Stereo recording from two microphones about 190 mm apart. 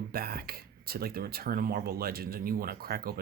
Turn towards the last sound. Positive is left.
turn(degrees=-55)  # may be behind; listen again after turning